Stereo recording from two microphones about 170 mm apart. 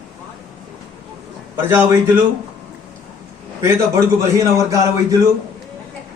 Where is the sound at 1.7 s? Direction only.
15° right (ahead or behind).